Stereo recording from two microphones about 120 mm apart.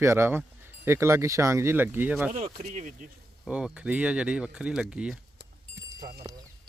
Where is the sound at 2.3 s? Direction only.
70° right (ahead or behind).